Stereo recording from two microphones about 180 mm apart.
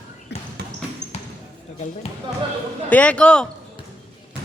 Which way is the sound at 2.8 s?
10° left (ahead or behind).